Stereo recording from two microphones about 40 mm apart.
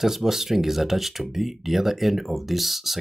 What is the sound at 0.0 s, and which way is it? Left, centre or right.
Speech, centre.